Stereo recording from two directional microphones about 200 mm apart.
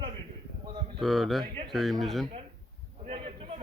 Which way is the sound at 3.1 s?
30° right (ahead or behind).